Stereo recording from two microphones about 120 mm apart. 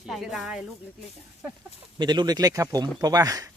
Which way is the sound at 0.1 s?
Centre (ahead or behind).